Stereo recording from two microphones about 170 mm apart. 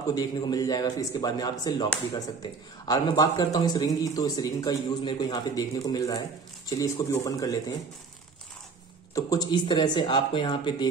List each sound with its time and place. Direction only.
0.1 s speech: 25° left (ahead or behind)
9.1 s speech: 20° left (ahead or behind)